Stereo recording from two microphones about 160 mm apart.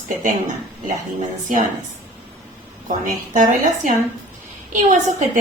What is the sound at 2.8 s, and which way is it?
A woman's voice, 55° right (ahead or behind).